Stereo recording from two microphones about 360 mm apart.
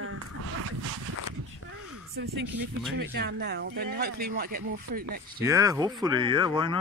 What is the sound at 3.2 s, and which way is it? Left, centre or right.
Speech, right.